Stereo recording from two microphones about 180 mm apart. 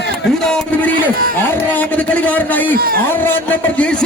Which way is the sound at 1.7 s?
10° left (ahead or behind).